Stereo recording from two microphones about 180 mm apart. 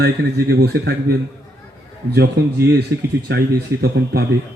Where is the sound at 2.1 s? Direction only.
60° right (ahead or behind).